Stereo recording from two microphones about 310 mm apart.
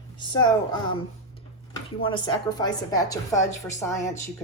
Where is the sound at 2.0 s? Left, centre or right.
Centre.